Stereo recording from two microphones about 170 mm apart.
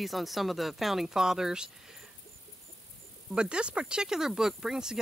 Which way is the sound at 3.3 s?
5° right (ahead or behind).